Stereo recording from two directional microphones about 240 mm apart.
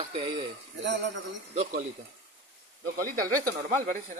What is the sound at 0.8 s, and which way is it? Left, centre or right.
Speech, right.